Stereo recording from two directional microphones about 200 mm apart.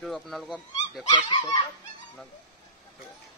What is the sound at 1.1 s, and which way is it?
Speech, 25° left (ahead or behind).